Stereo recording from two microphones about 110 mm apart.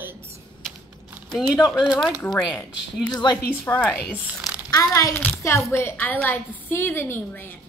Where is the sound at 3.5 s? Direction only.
15° left (ahead or behind).